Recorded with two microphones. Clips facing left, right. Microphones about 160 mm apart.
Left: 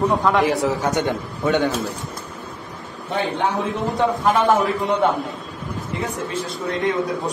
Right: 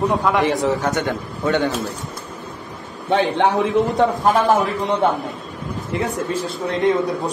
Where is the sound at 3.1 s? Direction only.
85° right.